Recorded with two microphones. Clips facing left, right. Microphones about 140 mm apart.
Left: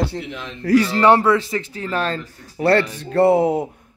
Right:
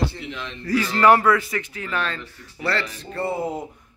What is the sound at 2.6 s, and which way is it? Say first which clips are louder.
Speech: left 10 dB; 55° left (ahead or behind).